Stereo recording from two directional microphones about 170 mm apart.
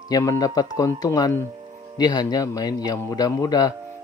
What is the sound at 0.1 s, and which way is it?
Speech, 20° left (ahead or behind).